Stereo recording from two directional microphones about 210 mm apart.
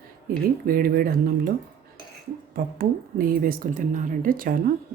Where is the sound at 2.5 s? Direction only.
45° right (ahead or behind).